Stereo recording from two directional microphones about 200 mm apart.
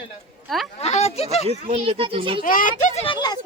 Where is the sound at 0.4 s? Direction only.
Centre (ahead or behind).